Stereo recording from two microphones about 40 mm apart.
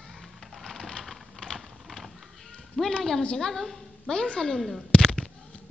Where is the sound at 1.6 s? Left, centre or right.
Centre.